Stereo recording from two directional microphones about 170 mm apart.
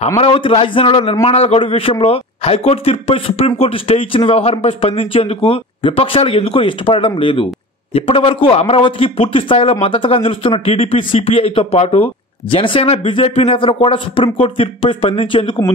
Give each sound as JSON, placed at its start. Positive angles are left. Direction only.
{"t": 0.2, "sound": "a man's voice", "side_deg": 30}